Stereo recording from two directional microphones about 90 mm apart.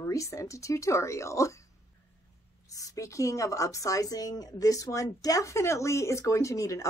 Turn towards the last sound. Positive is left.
turn(degrees=35)  # may be behind; listen again after turning